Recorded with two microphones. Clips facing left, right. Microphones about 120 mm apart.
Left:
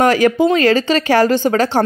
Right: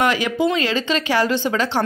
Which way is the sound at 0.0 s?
45° left (ahead or behind).